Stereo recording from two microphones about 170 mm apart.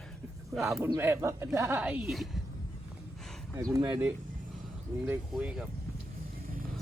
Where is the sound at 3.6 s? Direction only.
20° right (ahead or behind).